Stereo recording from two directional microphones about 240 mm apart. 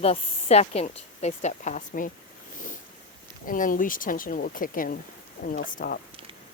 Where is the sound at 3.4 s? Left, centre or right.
Left.